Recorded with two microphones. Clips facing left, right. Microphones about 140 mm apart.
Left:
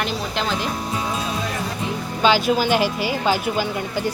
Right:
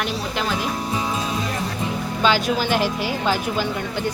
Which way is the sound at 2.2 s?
5° left (ahead or behind).